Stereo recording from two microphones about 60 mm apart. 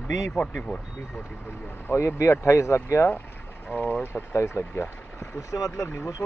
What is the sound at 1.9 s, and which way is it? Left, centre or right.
Speech, left.